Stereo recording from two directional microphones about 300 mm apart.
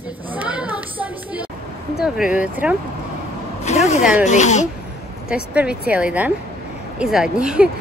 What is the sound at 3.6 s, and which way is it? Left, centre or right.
Speech, left.